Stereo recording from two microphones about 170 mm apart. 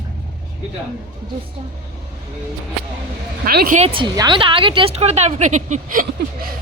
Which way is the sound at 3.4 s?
60° right (ahead or behind).